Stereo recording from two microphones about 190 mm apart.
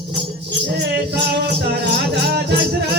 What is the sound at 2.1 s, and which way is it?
Music, 60° right (ahead or behind).